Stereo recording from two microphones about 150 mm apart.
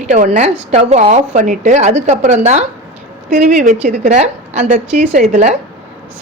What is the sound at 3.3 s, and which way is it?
A woman's voice, 65° right (ahead or behind).